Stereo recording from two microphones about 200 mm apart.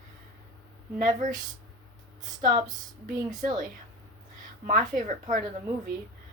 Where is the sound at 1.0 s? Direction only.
40° right (ahead or behind).